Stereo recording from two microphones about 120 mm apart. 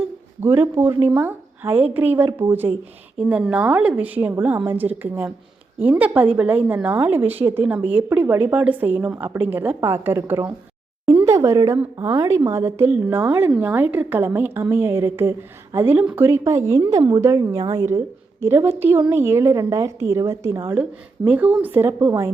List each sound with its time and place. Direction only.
0.4 s a woman's voice: 20° right (ahead or behind)
11.2 s a sound: 25° right (ahead or behind)
11.9 s a woman's voice: 30° right (ahead or behind)